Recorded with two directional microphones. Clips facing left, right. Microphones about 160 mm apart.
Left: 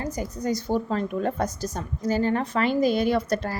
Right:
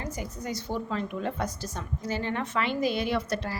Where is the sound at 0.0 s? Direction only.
40° left (ahead or behind).